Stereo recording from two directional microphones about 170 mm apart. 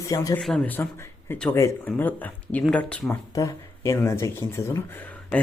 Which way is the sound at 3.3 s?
20° left (ahead or behind).